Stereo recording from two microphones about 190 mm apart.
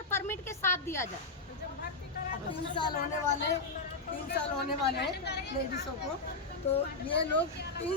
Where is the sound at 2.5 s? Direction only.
25° left (ahead or behind).